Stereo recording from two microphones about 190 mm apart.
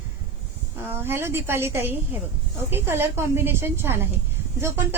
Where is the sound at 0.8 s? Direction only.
10° right (ahead or behind).